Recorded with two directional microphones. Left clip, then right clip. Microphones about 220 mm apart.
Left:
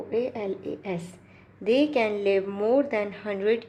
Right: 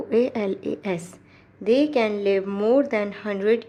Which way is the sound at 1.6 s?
15° right (ahead or behind).